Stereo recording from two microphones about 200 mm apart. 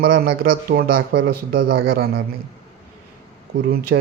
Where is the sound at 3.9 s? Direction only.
70° right (ahead or behind).